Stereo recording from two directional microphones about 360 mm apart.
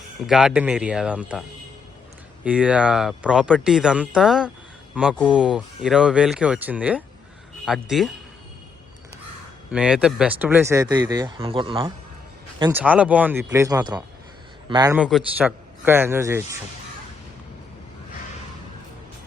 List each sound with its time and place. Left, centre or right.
0.3 s speech: centre
9.7 s speech: centre